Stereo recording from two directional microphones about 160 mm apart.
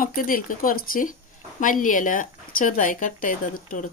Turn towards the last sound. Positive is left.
turn(degrees=55)  # may be behind; listen again after turning